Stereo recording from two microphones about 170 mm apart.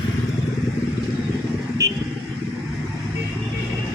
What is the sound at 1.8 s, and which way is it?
Vehicle, 15° right (ahead or behind).